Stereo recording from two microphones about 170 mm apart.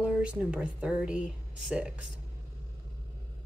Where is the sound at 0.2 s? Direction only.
5° right (ahead or behind).